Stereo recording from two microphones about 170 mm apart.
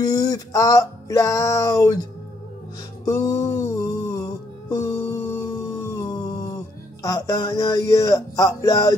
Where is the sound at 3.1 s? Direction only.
20° left (ahead or behind).